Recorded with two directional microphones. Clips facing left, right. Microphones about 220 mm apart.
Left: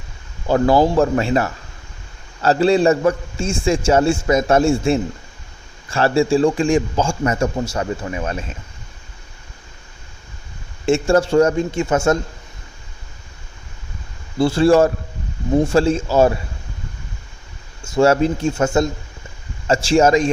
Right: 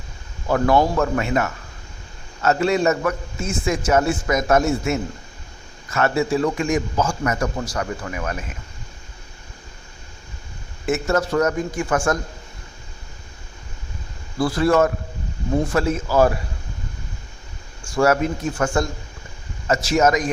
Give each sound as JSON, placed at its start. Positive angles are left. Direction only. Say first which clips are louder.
{"t": 0.4, "sound": "a man's voice", "louder": "left 3 dB", "side_deg": 30}
{"t": 10.8, "sound": "a man's voice", "louder": "left 5 dB", "side_deg": 30}
{"t": 14.3, "sound": "a man's voice", "louder": "left 4 dB", "side_deg": 25}
{"t": 17.8, "sound": "a man's voice", "louder": "left 4 dB", "side_deg": 25}